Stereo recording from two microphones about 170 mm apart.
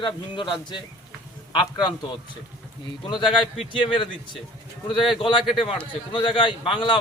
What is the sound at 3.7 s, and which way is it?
Speech, 30° left (ahead or behind).